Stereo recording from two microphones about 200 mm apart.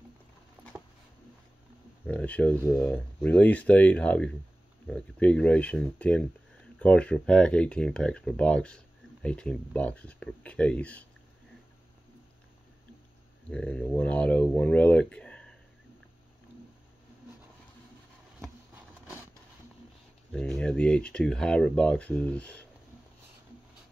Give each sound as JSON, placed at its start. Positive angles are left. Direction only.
{"t": 2.0, "sound": "speech", "side_deg": 5}
{"t": 13.5, "sound": "speech", "side_deg": 5}
{"t": 20.2, "sound": "speech", "side_deg": 5}